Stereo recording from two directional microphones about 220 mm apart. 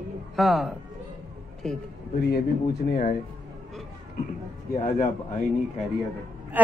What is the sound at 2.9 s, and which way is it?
Speech, 35° left (ahead or behind).